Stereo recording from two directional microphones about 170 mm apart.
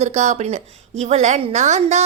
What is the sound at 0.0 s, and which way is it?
A woman's voice, 40° right (ahead or behind).